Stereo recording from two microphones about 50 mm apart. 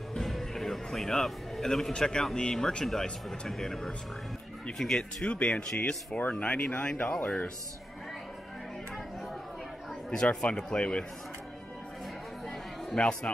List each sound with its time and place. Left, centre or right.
0.2 s music: centre
2.3 s speech: centre
5.2 s speech: left
10.1 s speech: centre
12.9 s speech: centre